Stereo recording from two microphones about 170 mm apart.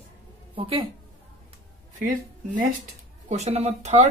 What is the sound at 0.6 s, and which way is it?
Speech, 30° right (ahead or behind).